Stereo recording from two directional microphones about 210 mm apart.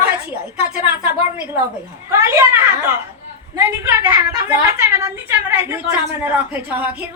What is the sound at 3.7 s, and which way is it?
A woman's voice, 10° right (ahead or behind).